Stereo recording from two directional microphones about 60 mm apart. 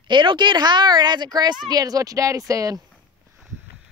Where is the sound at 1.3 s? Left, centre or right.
Right.